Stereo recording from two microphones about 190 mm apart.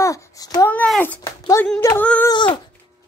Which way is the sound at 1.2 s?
15° left (ahead or behind).